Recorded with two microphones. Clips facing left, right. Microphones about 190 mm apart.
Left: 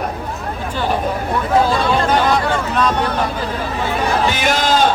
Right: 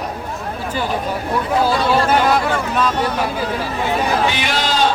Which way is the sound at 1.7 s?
5° right (ahead or behind).